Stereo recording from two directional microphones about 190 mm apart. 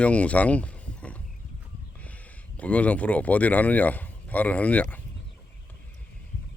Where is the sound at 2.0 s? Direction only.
5° left (ahead or behind).